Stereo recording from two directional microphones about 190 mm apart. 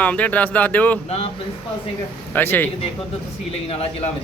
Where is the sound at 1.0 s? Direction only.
35° left (ahead or behind).